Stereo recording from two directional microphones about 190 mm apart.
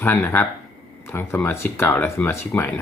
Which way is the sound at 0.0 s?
10° left (ahead or behind).